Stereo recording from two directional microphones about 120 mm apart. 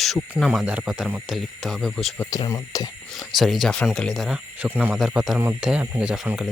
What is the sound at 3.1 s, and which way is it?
Speech, centre (ahead or behind).